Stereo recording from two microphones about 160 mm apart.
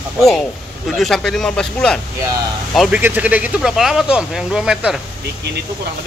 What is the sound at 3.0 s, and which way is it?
Speech, 10° right (ahead or behind).